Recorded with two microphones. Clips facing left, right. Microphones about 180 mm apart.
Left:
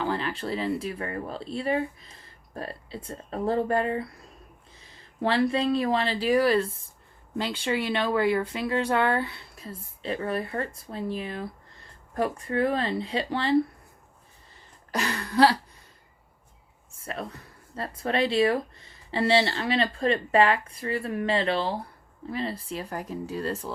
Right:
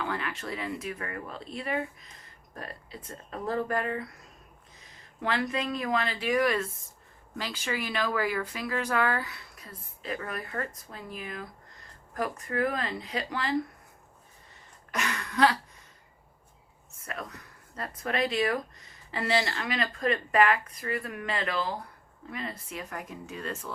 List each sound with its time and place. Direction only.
0.0 s speech: 30° left (ahead or behind)
14.9 s a sound: 35° left (ahead or behind)
16.9 s speech: 30° left (ahead or behind)